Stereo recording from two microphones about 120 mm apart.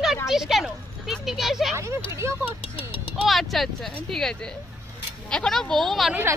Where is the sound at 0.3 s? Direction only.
Centre (ahead or behind).